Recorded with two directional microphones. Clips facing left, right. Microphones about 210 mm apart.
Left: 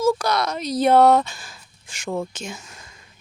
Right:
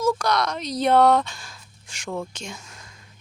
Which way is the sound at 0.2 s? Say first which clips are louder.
Left 1 dB; 5° left (ahead or behind).